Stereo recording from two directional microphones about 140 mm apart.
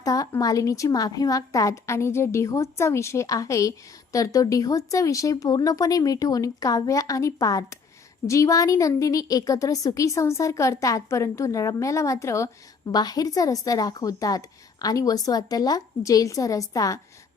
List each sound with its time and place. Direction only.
0.0 s a woman's voice: 25° left (ahead or behind)